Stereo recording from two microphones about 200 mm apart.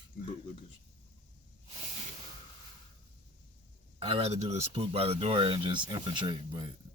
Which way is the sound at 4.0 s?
30° right (ahead or behind).